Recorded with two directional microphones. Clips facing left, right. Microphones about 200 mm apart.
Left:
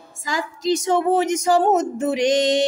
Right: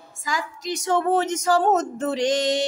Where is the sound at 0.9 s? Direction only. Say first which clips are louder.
Even; 10° left (ahead or behind).